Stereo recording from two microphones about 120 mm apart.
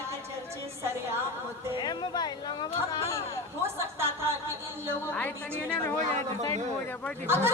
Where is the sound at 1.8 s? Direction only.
40° left (ahead or behind).